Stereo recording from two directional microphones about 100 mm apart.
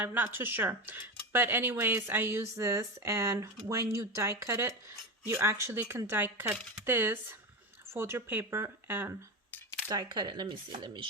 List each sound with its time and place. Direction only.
0.0 s speech: 20° right (ahead or behind)
9.9 s speech: 45° right (ahead or behind)